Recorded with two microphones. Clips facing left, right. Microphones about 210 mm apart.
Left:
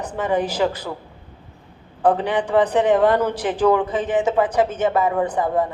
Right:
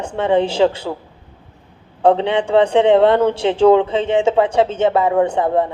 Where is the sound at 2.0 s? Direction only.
25° right (ahead or behind).